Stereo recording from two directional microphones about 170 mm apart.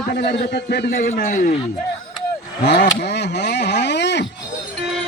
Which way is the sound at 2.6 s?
85° left.